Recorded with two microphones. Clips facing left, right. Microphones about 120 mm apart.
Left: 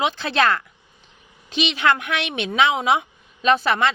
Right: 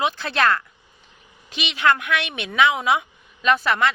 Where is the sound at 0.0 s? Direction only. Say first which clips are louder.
Left 1 dB; 20° left (ahead or behind).